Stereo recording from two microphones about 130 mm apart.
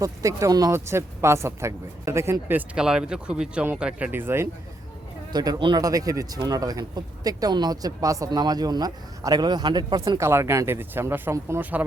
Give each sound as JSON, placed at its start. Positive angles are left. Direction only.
{"t": 0.0, "sound": "speech", "side_deg": -25}
{"t": 5.3, "sound": "speech", "side_deg": -30}
{"t": 10.2, "sound": "speech", "side_deg": -20}